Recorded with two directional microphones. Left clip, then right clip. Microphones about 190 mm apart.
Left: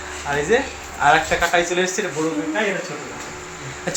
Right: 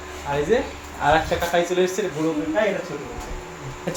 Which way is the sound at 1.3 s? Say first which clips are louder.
Left 4 dB; 20° left (ahead or behind).